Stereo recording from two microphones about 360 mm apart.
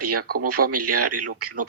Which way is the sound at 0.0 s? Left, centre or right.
Right.